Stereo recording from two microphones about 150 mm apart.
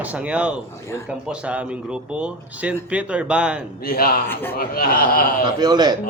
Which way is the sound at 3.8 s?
75° left (ahead or behind).